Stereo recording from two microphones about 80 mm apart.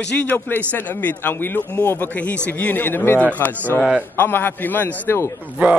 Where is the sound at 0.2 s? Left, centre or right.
Left.